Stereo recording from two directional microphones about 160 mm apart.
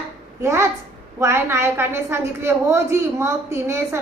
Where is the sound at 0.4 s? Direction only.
15° right (ahead or behind).